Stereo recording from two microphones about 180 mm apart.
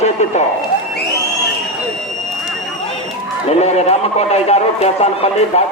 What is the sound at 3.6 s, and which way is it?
A man's voice, 35° left (ahead or behind).